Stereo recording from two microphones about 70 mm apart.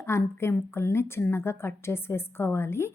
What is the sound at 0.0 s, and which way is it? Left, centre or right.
A woman's voice, left.